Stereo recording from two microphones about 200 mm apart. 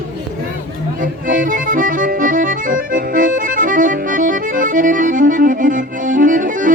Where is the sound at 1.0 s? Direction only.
40° right (ahead or behind).